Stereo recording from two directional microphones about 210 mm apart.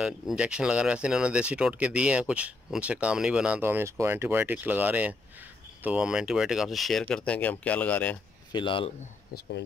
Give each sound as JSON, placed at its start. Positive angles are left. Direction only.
{"t": 0.0, "sound": "speech", "side_deg": -5}
{"t": 8.5, "sound": "speech", "side_deg": 25}